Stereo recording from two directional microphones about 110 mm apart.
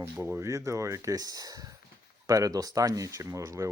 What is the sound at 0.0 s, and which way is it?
Speech, 20° right (ahead or behind).